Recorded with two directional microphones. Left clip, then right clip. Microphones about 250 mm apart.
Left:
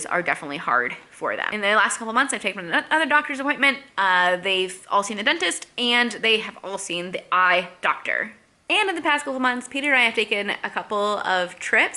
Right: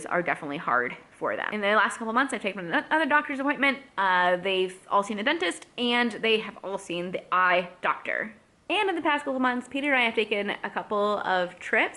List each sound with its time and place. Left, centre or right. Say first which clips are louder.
0.0 s a woman's voice: left 4 dB; centre